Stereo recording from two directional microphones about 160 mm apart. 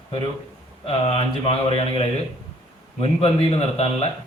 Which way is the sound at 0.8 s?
35° left (ahead or behind).